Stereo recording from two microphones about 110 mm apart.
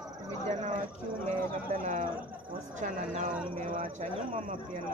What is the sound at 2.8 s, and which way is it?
Speech, 90° right.